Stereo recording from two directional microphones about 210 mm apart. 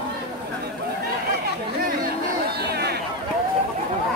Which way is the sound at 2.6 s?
50° right (ahead or behind).